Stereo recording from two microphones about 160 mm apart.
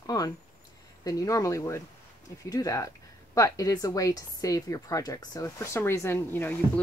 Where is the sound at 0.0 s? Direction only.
20° left (ahead or behind).